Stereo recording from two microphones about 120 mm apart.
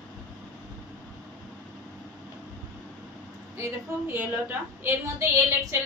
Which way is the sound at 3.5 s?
20° right (ahead or behind).